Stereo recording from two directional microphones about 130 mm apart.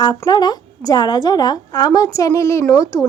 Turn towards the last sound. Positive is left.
turn(degrees=25)  # may be behind; listen again after turning